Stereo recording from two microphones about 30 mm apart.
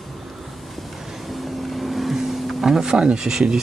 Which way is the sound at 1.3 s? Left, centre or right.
Centre.